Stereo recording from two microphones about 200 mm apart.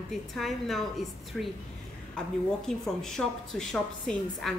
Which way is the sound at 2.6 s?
Centre (ahead or behind).